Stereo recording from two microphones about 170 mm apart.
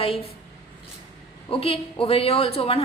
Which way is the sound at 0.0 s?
35° left (ahead or behind).